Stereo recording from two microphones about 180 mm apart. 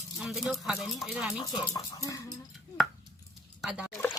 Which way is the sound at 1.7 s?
20° left (ahead or behind).